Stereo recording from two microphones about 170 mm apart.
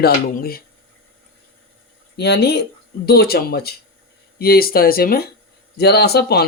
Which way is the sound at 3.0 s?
65° left (ahead or behind).